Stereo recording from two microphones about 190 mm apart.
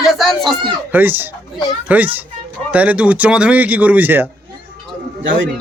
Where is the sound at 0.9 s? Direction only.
10° right (ahead or behind).